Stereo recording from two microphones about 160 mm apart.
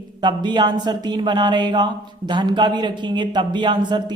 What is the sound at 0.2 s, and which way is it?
Speech, 30° right (ahead or behind).